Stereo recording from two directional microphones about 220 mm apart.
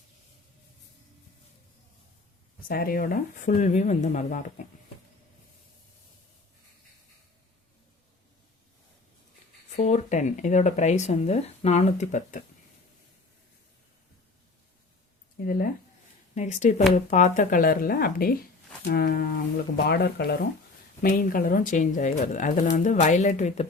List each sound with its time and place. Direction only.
2.6 s speech: 40° left (ahead or behind)
9.6 s speech: 30° left (ahead or behind)
16.3 s speech: 35° left (ahead or behind)